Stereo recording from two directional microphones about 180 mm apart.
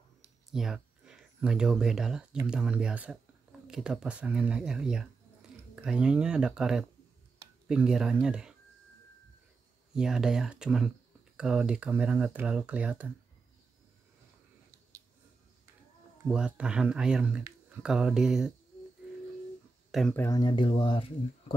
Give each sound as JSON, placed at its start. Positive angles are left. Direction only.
{"t": 0.5, "sound": "speech", "side_deg": 0}
{"t": 9.9, "sound": "speech", "side_deg": -5}
{"t": 16.3, "sound": "speech", "side_deg": -5}
{"t": 19.9, "sound": "speech", "side_deg": 0}
{"t": 20.2, "sound": "speech", "side_deg": 20}